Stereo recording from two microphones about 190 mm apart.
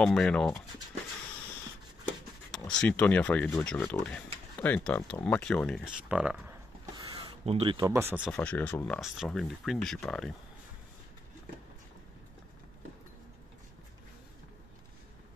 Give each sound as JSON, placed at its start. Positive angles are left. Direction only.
{"t": 0.0, "sound": "speech", "side_deg": 5}
{"t": 2.5, "sound": "speech", "side_deg": 5}
{"t": 7.0, "sound": "a sound", "side_deg": -20}
{"t": 7.4, "sound": "speech", "side_deg": -30}
{"t": 7.8, "sound": "speech", "side_deg": -10}
{"t": 8.3, "sound": "speech", "side_deg": 10}